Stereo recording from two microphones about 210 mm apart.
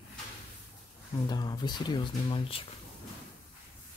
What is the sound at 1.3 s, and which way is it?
Speech, 20° left (ahead or behind).